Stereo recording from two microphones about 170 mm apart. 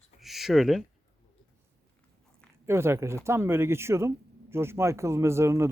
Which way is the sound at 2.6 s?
15° right (ahead or behind).